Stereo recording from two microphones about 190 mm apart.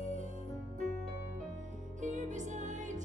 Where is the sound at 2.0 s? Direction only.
40° right (ahead or behind).